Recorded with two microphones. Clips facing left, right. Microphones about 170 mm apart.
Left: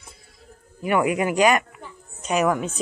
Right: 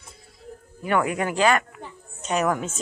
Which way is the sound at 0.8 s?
10° left (ahead or behind).